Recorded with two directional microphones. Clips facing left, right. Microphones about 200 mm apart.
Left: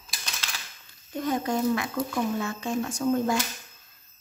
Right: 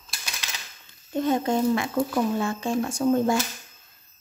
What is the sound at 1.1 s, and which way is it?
Speech, 25° right (ahead or behind).